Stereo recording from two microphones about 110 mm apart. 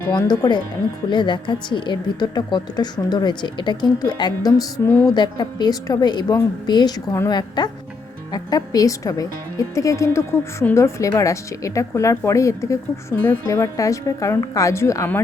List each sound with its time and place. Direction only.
0.1 s a woman's voice: 40° left (ahead or behind)